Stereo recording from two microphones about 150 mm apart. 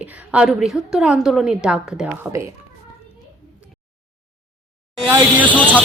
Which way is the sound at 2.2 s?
20° right (ahead or behind).